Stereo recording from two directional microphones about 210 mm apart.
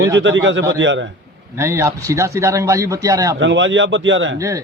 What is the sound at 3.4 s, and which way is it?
Speech, 60° right (ahead or behind).